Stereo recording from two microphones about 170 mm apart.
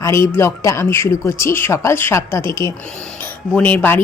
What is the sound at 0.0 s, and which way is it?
Speech, 15° left (ahead or behind).